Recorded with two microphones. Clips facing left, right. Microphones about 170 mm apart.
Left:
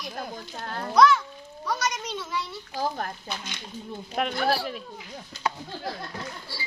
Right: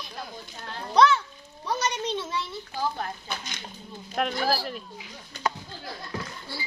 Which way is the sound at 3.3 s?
45° right (ahead or behind).